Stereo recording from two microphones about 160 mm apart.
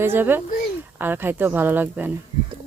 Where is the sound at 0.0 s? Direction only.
15° right (ahead or behind).